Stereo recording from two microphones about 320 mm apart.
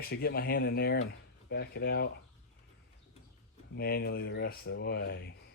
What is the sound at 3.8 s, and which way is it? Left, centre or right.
Speech, left.